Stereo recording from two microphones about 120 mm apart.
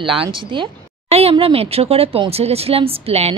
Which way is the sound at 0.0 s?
45° right (ahead or behind).